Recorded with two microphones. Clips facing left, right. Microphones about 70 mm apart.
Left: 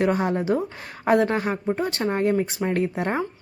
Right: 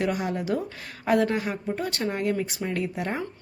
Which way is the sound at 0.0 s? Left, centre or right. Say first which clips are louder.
Left 5 dB; left.